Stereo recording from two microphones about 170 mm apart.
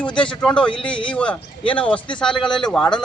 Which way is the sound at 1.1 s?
5° left (ahead or behind).